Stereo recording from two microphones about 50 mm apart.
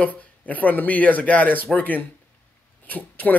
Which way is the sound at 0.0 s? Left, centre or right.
Left.